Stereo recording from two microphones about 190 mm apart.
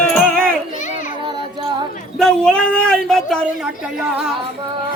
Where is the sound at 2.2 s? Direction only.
5° left (ahead or behind).